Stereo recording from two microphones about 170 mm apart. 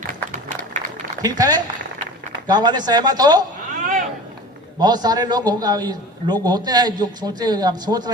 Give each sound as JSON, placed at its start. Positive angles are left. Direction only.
{"t": 0.1, "sound": "applause", "side_deg": -50}
{"t": 1.2, "sound": "a man's voice", "side_deg": -20}
{"t": 4.8, "sound": "a man's voice", "side_deg": -25}